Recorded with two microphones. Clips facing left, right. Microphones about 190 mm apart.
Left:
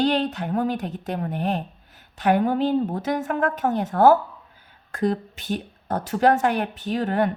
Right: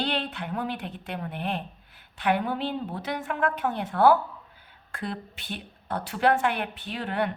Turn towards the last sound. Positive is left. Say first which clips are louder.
# left 7 dB
turn(degrees=45)  # may be behind; listen again after turning